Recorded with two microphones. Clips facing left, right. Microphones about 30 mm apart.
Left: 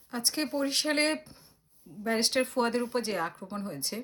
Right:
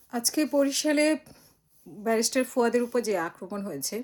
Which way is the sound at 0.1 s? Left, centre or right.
Left.